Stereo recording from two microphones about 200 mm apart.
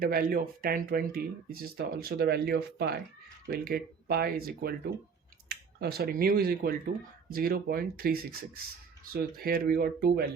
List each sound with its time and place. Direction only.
0.0 s speech: 50° right (ahead or behind)